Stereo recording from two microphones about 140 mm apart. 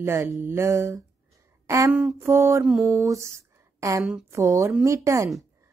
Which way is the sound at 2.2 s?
20° right (ahead or behind).